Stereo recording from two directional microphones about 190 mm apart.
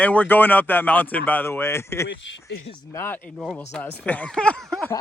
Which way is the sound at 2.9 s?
15° left (ahead or behind).